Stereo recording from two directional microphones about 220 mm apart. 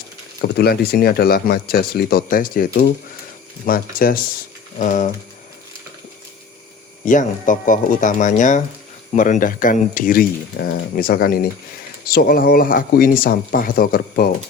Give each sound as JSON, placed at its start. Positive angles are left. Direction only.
{"t": 0.4, "sound": "speech", "side_deg": 45}
{"t": 3.7, "sound": "speech", "side_deg": 40}
{"t": 7.0, "sound": "speech", "side_deg": 35}